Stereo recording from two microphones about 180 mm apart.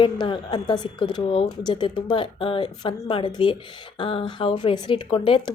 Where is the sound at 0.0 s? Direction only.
25° left (ahead or behind).